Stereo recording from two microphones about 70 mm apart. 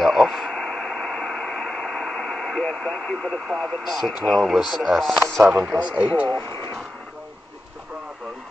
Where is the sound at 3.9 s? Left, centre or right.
Centre.